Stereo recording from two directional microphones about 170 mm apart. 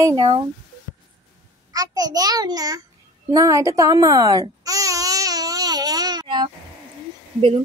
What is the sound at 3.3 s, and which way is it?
Baby cry, 20° right (ahead or behind).